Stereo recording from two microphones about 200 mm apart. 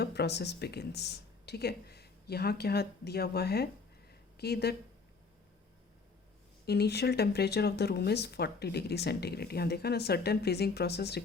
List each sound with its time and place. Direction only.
0.0 s speech: 55° left (ahead or behind)
6.7 s speech: 55° left (ahead or behind)